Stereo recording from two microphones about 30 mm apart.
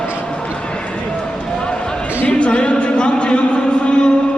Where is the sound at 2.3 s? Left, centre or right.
Left.